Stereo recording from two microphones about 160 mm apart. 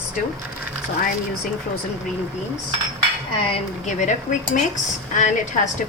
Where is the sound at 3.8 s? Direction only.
50° left (ahead or behind).